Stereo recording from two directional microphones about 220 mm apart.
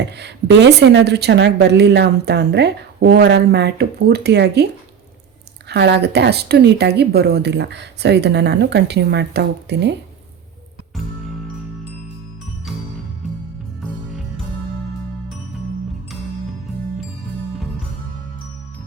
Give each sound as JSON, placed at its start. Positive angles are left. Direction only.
{"t": 0.0, "sound": "a woman's voice", "side_deg": -50}
{"t": 13.8, "sound": "music", "side_deg": 0}